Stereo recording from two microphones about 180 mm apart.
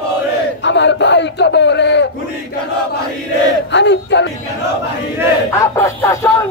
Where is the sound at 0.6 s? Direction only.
80° left.